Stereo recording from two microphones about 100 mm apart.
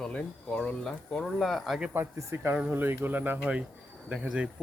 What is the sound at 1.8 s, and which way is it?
Speech, 20° right (ahead or behind).